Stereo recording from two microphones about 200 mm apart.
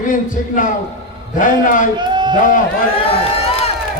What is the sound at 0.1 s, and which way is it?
A man's voice, 40° left (ahead or behind).